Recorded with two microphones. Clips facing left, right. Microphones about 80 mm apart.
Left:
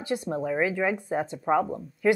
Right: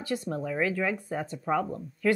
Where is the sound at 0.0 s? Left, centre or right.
Left.